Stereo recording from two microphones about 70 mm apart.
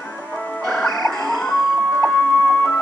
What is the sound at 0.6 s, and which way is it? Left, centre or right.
Music, centre.